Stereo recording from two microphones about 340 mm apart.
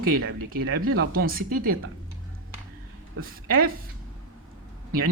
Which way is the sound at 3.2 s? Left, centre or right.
Right.